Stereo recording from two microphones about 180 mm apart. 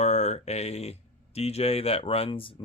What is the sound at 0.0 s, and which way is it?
Speech, 40° left (ahead or behind).